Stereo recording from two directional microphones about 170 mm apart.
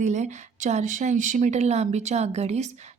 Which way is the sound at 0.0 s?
45° right (ahead or behind).